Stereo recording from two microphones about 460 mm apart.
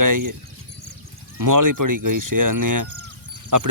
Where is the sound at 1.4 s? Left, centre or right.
Right.